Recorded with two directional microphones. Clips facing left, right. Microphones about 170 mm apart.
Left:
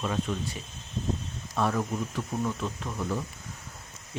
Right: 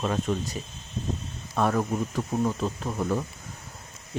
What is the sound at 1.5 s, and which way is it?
Speech, 50° right (ahead or behind).